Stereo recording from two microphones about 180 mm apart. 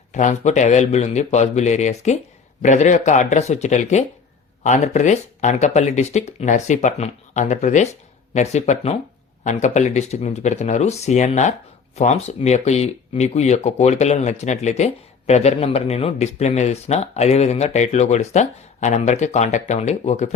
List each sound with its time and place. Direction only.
0.1 s speech: 40° left (ahead or behind)